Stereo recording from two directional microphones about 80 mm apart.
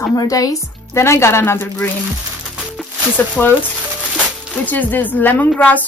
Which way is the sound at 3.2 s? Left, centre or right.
Left.